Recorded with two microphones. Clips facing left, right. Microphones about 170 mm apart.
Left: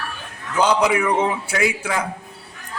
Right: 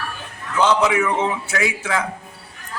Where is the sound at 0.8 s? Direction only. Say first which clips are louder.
Left 1 dB; 10° left (ahead or behind).